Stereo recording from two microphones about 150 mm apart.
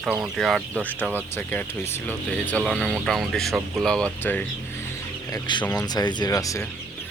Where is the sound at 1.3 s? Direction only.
15° left (ahead or behind).